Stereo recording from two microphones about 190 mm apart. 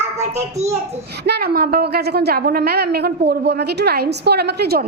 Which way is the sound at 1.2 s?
55° right (ahead or behind).